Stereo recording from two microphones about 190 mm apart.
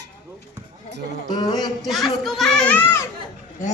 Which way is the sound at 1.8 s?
Centre (ahead or behind).